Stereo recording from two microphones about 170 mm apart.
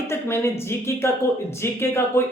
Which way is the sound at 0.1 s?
15° left (ahead or behind).